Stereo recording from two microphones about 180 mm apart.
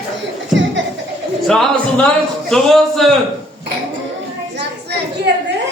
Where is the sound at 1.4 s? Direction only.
Centre (ahead or behind).